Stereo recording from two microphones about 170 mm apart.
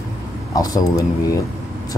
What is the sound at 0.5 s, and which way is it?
Speech, 20° left (ahead or behind).